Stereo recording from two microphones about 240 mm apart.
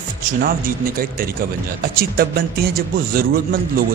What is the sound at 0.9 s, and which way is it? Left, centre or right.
Speech, right.